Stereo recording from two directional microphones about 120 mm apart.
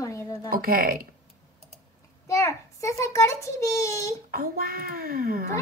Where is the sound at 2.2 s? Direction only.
25° left (ahead or behind).